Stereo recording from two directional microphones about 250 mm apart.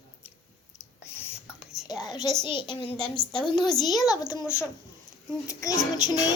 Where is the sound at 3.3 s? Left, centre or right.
Centre.